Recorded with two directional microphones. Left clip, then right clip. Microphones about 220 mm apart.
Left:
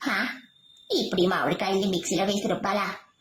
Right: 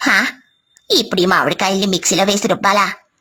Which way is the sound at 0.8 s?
40° right (ahead or behind).